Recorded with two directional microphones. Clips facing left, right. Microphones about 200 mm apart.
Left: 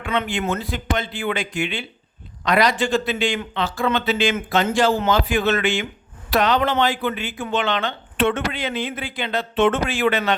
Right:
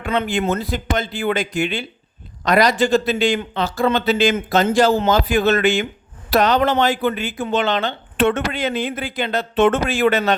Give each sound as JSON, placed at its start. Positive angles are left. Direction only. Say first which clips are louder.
{"t": 0.0, "sound": "speech", "louder": "right 3 dB", "side_deg": -40}